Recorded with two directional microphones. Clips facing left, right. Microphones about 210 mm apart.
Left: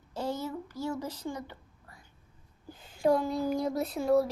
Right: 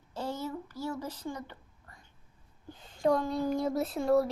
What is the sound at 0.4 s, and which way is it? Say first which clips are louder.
Speech: left 1 dB; 15° left (ahead or behind).